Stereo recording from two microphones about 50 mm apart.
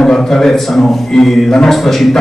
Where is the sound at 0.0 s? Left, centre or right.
Centre.